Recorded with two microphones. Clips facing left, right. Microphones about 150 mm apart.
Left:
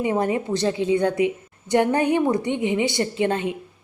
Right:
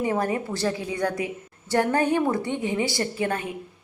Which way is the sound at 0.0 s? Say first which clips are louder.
Left 3 dB; 20° left (ahead or behind).